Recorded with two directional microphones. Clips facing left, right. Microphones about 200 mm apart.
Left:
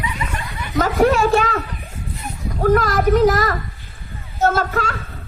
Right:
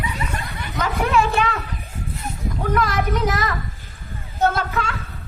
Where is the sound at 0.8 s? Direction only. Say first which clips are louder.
Left 5 dB; 40° left (ahead or behind).